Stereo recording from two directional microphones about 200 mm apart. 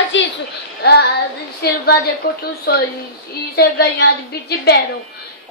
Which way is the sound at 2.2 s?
45° left (ahead or behind).